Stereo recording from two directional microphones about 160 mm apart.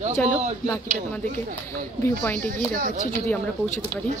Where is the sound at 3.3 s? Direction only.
5° left (ahead or behind).